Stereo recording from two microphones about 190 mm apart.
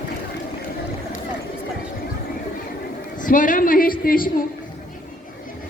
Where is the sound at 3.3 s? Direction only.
45° left (ahead or behind).